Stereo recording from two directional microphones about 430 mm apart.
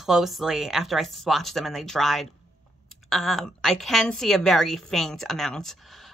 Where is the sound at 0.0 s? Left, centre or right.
Centre.